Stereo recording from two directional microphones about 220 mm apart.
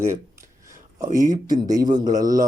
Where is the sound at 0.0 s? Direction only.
15° right (ahead or behind).